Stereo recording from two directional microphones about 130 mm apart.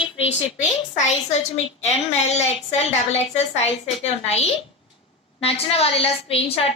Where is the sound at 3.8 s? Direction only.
55° left (ahead or behind).